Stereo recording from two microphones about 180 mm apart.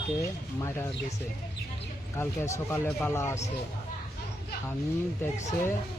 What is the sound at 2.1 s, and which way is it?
Speech, 15° left (ahead or behind).